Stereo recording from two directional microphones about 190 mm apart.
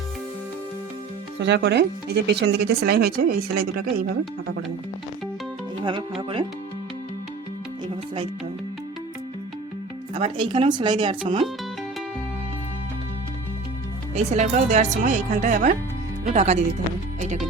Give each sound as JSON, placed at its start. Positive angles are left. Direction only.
{"t": 1.4, "sound": "speech", "side_deg": -65}
{"t": 5.8, "sound": "speech", "side_deg": -25}
{"t": 10.2, "sound": "speech", "side_deg": -30}
{"t": 14.3, "sound": "a woman's voice", "side_deg": -35}
{"t": 17.2, "sound": "music", "side_deg": -35}